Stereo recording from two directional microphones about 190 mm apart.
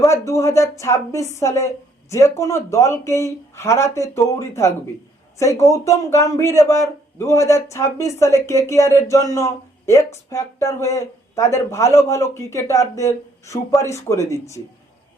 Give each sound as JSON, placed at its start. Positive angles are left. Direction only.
{"t": 0.0, "sound": "speech", "side_deg": 15}